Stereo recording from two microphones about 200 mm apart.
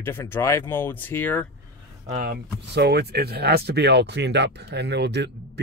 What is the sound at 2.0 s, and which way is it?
Speech, 40° right (ahead or behind).